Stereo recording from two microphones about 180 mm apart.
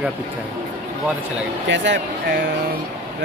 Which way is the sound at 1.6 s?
85° right.